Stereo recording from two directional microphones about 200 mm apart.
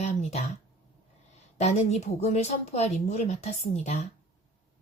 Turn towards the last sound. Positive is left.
turn(degrees=35)  # may be behind; listen again after turning